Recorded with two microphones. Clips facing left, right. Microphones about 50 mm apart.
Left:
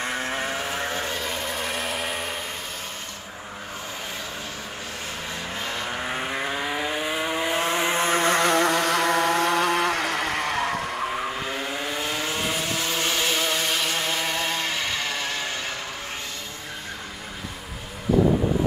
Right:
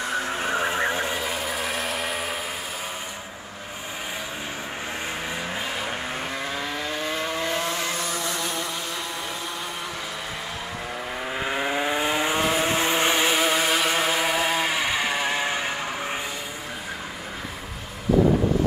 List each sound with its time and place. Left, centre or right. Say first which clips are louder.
0.0 s vehicle: right 1 dB; left
0.4 s vehicle: right 4 dB; right; by 2.3 s centre
6.0 s vehicle: left 2 dB; centre
7.6 s vehicle: left 5 dB; left
8.2 s vehicle: left 9 dB; left
11.4 s vehicle: right 4 dB; right